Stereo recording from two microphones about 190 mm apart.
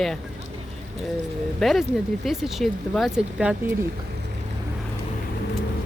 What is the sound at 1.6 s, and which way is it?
Speech, centre (ahead or behind).